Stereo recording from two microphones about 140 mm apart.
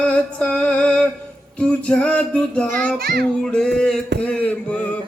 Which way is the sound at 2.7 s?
70° right (ahead or behind).